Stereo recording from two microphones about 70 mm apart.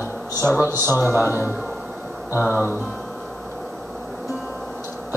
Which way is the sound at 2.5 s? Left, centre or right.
Left.